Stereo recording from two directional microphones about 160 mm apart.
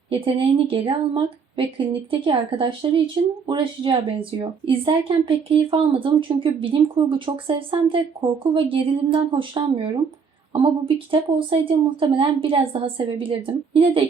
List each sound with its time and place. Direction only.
0.1 s speech: 35° right (ahead or behind)